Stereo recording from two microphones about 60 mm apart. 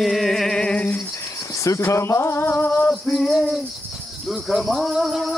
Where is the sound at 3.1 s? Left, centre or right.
Centre.